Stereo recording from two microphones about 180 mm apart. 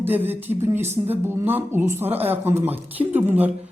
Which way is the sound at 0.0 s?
10° right (ahead or behind).